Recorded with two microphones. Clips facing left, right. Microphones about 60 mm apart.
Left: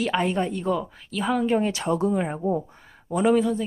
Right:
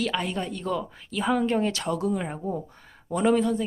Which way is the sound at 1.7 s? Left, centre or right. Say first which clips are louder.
Left 4 dB; left.